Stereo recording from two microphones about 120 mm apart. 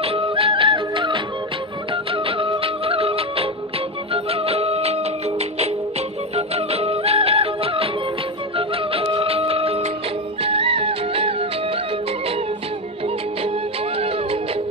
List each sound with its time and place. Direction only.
0.0 s music: 50° right (ahead or behind)